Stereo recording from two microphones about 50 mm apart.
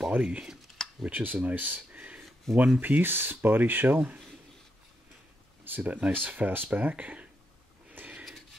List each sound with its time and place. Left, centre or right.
0.2 s speech: centre
0.8 s computer keyboard: centre
1.1 s speech: right
2.0 s a sound: right
2.5 s speech: centre
2.8 s speech: right
5.8 s speech: right
7.9 s a sound: right